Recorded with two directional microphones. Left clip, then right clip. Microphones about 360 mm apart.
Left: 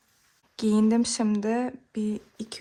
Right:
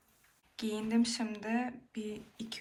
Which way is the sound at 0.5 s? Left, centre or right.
Left.